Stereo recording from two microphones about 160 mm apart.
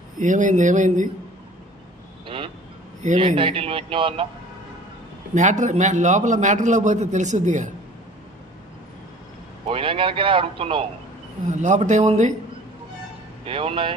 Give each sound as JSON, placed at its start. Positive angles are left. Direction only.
{"t": 0.2, "sound": "a man's voice", "side_deg": -50}
{"t": 2.2, "sound": "vehicle", "side_deg": -35}
{"t": 3.2, "sound": "a man's voice", "side_deg": -35}
{"t": 5.3, "sound": "a man's voice", "side_deg": -50}
{"t": 9.7, "sound": "a man's voice", "side_deg": -35}
{"t": 11.4, "sound": "a man's voice", "side_deg": -50}
{"t": 13.5, "sound": "a man's voice", "side_deg": -35}